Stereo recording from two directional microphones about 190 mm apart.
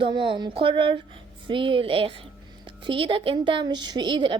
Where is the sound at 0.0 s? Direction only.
25° right (ahead or behind).